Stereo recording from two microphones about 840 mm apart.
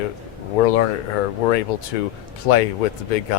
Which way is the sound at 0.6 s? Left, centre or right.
Left.